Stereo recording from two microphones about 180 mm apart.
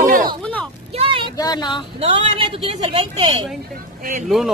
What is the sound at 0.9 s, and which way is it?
Speech, 30° right (ahead or behind).